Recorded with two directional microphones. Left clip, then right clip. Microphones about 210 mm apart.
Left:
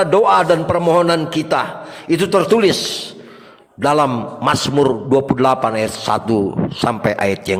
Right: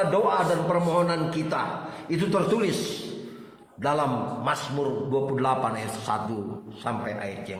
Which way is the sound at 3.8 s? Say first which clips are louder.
Left 10 dB; 45° left (ahead or behind).